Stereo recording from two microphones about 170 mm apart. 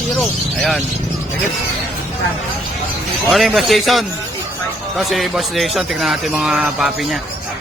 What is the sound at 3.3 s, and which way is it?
Speech, centre (ahead or behind).